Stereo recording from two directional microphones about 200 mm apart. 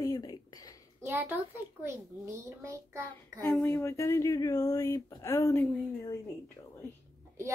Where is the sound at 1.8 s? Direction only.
15° right (ahead or behind).